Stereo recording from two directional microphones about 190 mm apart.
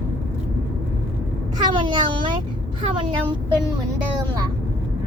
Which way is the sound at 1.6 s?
25° right (ahead or behind).